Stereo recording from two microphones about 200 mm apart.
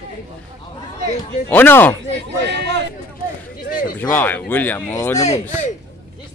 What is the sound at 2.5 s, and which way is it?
Speech, 60° right (ahead or behind).